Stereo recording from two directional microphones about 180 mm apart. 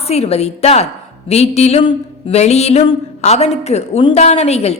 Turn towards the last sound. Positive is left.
turn(degrees=35)  # may be behind; listen again after turning